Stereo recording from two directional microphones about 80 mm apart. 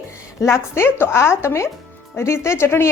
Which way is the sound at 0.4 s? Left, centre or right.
Left.